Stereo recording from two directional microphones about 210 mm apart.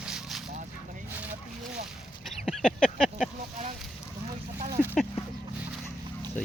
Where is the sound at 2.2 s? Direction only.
Centre (ahead or behind).